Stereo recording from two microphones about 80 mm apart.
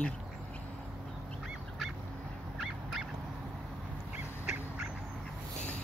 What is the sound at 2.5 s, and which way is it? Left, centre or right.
Dog, centre.